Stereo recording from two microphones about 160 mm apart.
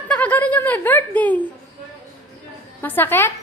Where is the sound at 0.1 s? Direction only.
10° left (ahead or behind).